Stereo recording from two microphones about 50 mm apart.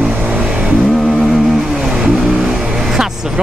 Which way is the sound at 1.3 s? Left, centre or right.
Centre.